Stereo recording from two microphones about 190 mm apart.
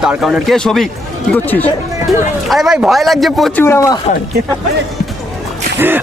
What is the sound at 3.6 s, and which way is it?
Speech, 15° left (ahead or behind).